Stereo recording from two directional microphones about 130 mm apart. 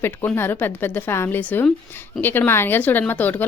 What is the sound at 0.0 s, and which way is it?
A woman's voice, 15° left (ahead or behind).